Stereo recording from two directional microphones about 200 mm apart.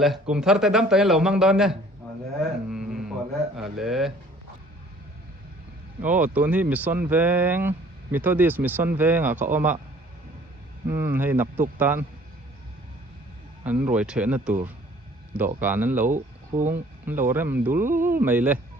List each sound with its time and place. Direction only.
0.0 s a man's voice: centre (ahead or behind)
2.6 s a sound: centre (ahead or behind)
3.6 s a man's voice: centre (ahead or behind)
6.0 s speech: 10° right (ahead or behind)
10.8 s speech: 10° right (ahead or behind)
13.7 s speech: 5° right (ahead or behind)
15.6 s speech: 10° right (ahead or behind)
16.0 s speech: 40° right (ahead or behind)
16.6 s speech: 10° right (ahead or behind)